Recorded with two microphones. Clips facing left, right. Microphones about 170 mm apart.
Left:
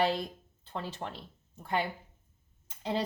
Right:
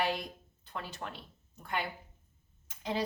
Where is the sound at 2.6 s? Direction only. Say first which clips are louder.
Left 2 dB; 30° left (ahead or behind).